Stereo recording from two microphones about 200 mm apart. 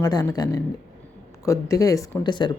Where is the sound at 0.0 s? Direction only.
20° left (ahead or behind).